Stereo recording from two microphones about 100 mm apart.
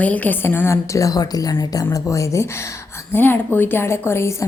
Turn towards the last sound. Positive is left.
turn(degrees=25)  # may be behind; listen again after turning